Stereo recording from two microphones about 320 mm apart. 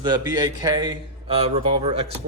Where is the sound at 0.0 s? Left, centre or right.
Centre.